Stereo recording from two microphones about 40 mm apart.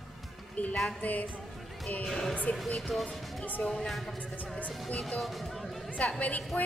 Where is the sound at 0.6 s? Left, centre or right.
Left.